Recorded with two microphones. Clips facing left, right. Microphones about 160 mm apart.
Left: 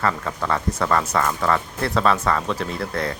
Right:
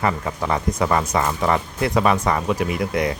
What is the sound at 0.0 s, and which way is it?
Speech, 15° right (ahead or behind).